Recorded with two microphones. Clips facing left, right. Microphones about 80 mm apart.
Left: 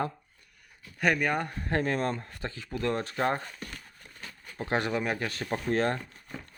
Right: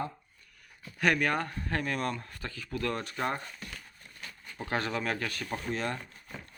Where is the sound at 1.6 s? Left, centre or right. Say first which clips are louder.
Left 4 dB; left.